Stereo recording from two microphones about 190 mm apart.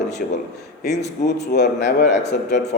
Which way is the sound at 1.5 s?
60° left (ahead or behind).